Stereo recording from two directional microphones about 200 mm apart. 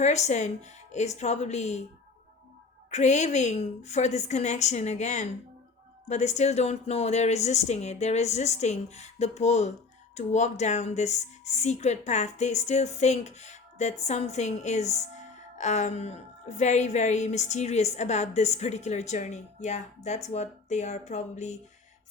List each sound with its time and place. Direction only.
0.0 s speech: 35° left (ahead or behind)
2.9 s speech: 35° left (ahead or behind)